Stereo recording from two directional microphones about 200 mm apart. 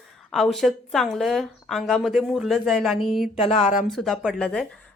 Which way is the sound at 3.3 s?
30° left (ahead or behind).